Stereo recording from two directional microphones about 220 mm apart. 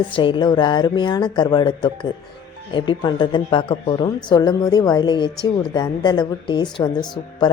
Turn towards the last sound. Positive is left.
turn(degrees=20)  # may be behind; listen again after turning